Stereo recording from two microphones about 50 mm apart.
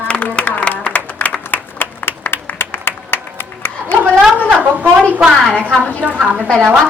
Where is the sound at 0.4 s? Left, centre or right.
Left.